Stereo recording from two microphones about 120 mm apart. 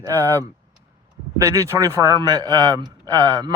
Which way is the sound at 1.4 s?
25° right (ahead or behind).